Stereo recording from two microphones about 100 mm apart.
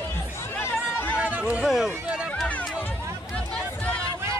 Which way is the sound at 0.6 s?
25° left (ahead or behind).